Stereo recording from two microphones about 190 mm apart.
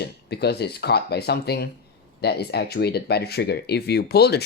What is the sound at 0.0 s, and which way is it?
Speech, 60° left (ahead or behind).